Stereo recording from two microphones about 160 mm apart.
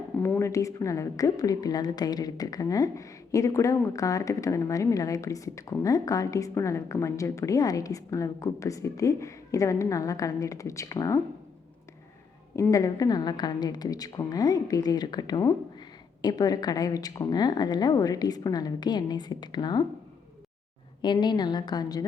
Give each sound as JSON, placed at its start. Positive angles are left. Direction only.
{"t": 0.2, "sound": "a woman's voice", "side_deg": 15}
{"t": 12.5, "sound": "a woman's voice", "side_deg": 20}
{"t": 21.0, "sound": "a woman's voice", "side_deg": 30}